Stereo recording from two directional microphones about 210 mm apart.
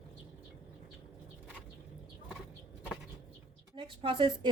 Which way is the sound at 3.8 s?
25° right (ahead or behind).